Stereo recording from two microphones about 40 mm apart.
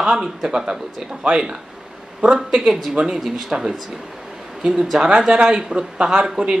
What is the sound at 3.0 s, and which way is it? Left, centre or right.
A woman's voice, centre.